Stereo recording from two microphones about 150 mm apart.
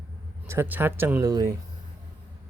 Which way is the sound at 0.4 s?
15° right (ahead or behind).